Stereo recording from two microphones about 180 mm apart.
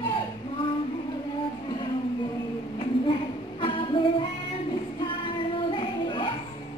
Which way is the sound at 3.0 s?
30° left (ahead or behind).